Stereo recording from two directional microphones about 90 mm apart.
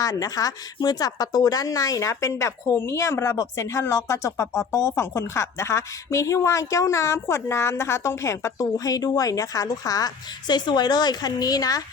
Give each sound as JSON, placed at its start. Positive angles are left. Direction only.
{"t": 0.0, "sound": "a woman's voice", "side_deg": 40}